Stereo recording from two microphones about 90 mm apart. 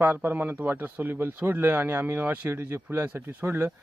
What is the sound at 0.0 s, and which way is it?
A man's voice, 20° right (ahead or behind).